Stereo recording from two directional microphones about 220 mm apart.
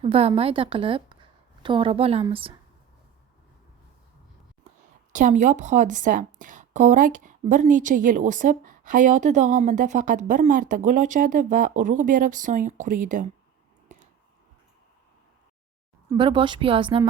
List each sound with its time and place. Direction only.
0.0 s a woman's voice: 25° right (ahead or behind)
5.1 s a woman's voice: 35° right (ahead or behind)
13.8 s a sound: 35° right (ahead or behind)
16.0 s speech: 20° right (ahead or behind)